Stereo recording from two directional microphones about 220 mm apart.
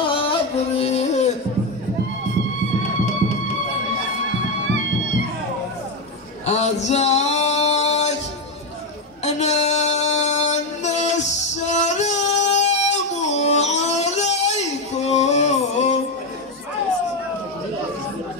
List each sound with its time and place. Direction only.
0.1 s music: 25° left (ahead or behind)
6.4 s male singing: 30° left (ahead or behind)
9.2 s music: 30° left (ahead or behind)